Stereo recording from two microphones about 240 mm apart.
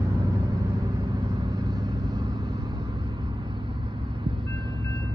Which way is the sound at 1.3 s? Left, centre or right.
Centre.